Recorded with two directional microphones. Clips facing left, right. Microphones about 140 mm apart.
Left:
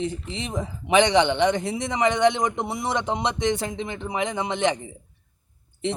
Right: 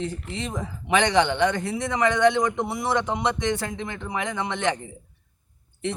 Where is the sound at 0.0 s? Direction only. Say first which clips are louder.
Left 1 dB; 20° left (ahead or behind).